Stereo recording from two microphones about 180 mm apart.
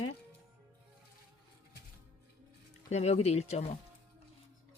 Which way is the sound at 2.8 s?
40° left (ahead or behind).